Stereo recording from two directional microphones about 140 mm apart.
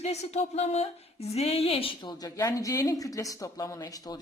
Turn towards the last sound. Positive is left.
turn(degrees=25)  # may be behind; listen again after turning